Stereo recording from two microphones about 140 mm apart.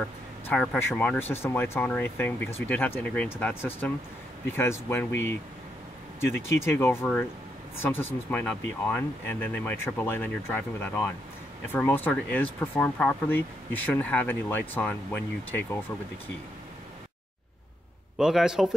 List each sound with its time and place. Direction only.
0.5 s speech: 15° left (ahead or behind)
18.1 s a man's voice: 5° right (ahead or behind)